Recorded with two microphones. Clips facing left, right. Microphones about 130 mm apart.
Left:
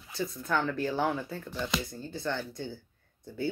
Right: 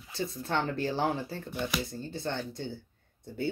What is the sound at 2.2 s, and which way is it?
Speech, 55° right (ahead or behind).